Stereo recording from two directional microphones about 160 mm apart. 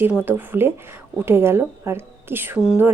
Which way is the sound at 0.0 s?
10° right (ahead or behind).